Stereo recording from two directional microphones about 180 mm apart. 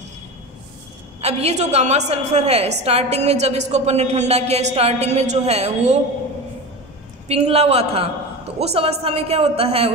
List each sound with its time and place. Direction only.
1.2 s a woman's voice: 35° right (ahead or behind)
7.2 s a woman's voice: 35° right (ahead or behind)